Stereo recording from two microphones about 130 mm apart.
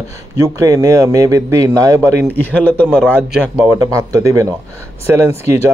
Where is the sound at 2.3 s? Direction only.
10° left (ahead or behind).